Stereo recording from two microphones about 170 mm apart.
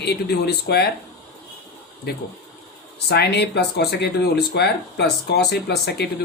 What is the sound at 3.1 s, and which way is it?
Speech, 75° left (ahead or behind).